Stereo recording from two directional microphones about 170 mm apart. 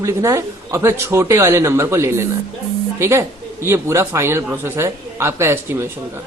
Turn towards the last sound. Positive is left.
turn(degrees=-15)  # may be behind; listen again after turning